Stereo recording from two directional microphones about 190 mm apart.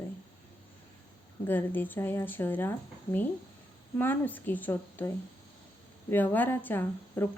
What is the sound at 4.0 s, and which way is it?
Speech, 10° left (ahead or behind).